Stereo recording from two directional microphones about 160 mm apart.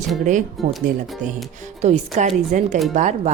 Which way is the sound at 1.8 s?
45° right (ahead or behind).